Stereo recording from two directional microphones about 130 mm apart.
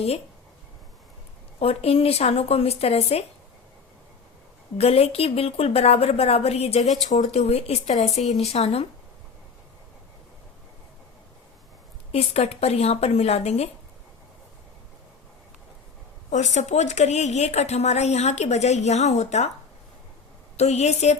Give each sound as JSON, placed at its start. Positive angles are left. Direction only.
{"t": 1.5, "sound": "a woman's voice", "side_deg": 50}
{"t": 4.8, "sound": "a woman's voice", "side_deg": 50}
{"t": 12.1, "sound": "a woman's voice", "side_deg": 55}
{"t": 16.3, "sound": "a woman's voice", "side_deg": 65}
{"t": 20.6, "sound": "a woman's voice", "side_deg": 55}